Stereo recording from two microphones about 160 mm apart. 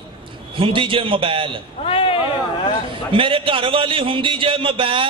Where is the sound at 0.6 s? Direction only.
35° right (ahead or behind).